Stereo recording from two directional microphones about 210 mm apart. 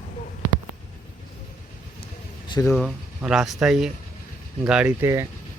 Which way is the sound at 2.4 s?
20° left (ahead or behind).